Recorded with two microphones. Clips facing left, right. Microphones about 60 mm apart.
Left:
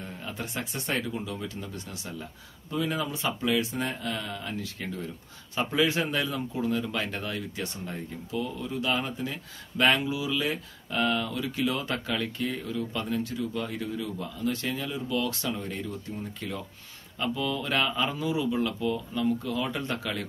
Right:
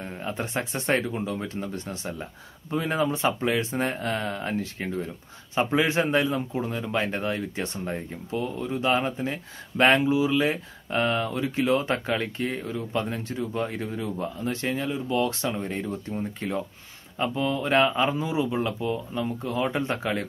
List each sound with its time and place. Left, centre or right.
0.0 s speech: right